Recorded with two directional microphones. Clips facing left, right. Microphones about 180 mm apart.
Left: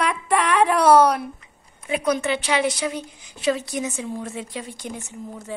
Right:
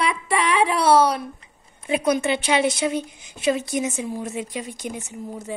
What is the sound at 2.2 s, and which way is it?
A woman's voice, 25° right (ahead or behind).